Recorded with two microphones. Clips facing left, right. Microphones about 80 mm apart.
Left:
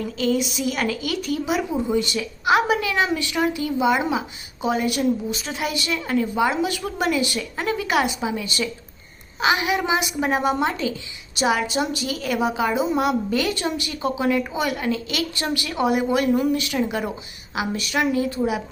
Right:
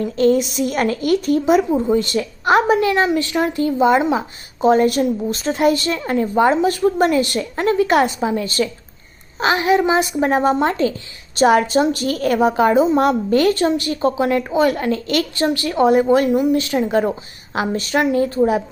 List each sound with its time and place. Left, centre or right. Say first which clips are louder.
0.2 s a woman's voice: right 7 dB; right
2.9 s a woman's voice: right 5 dB; right
15.7 s a woman's voice: right 7 dB; right